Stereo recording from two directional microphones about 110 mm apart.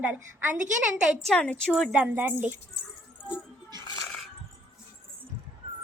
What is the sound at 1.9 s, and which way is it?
Speech, 15° right (ahead or behind).